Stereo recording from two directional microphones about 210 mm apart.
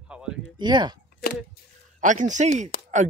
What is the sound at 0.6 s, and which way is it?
Speech, 20° right (ahead or behind).